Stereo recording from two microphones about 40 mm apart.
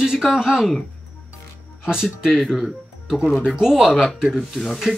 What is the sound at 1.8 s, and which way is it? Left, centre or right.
Speech, centre.